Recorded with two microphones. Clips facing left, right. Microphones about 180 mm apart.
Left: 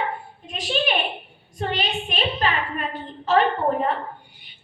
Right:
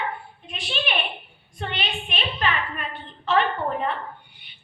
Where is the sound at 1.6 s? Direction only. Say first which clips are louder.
Left 5 dB; 40° left (ahead or behind).